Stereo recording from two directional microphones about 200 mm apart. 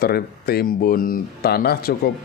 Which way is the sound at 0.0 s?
50° left (ahead or behind).